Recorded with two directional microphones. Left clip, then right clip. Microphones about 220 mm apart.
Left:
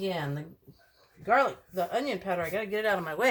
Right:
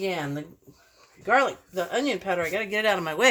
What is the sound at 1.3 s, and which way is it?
Speech, 40° right (ahead or behind).